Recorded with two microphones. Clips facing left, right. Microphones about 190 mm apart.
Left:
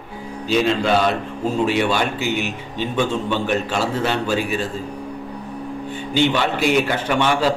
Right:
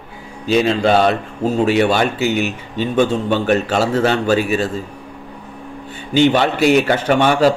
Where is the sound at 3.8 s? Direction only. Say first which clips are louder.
Right 5 dB; 80° right.